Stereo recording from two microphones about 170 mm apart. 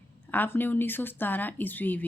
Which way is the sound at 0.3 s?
10° left (ahead or behind).